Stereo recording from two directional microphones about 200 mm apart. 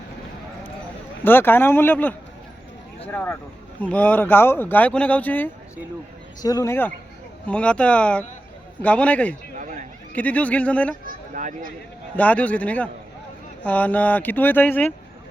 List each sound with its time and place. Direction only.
1.2 s speech: 10° left (ahead or behind)
11.0 s a sound: 40° right (ahead or behind)
12.1 s speech: 5° left (ahead or behind)